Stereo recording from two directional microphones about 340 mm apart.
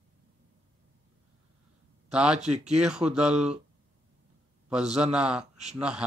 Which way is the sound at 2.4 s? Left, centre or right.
Centre.